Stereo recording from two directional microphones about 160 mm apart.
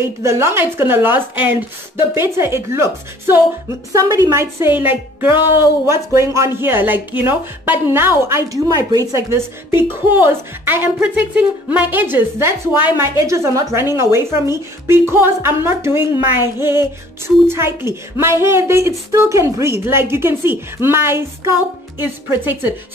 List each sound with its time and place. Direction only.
0.0 s a woman's voice: 15° right (ahead or behind)